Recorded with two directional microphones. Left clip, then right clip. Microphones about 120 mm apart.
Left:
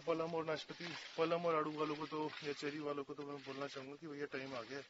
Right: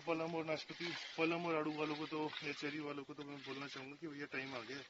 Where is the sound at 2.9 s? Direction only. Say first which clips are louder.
Left 4 dB; 35° left (ahead or behind).